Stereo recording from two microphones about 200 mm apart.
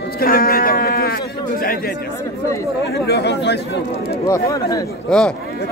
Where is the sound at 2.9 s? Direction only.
55° left (ahead or behind).